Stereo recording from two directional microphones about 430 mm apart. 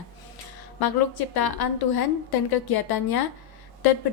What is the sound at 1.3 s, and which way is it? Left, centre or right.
A woman's voice, left.